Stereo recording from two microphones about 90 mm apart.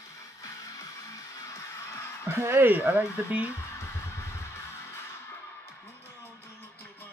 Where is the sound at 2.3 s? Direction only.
25° right (ahead or behind).